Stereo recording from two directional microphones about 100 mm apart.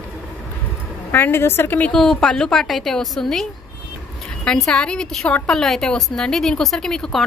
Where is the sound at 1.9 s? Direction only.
5° left (ahead or behind).